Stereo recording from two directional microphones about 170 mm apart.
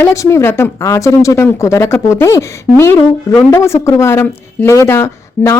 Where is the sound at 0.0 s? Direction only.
15° left (ahead or behind).